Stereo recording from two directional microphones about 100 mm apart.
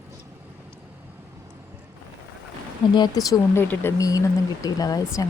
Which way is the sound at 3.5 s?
25° left (ahead or behind).